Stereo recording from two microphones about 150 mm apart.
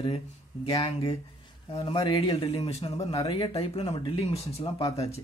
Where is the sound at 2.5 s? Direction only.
45° left (ahead or behind).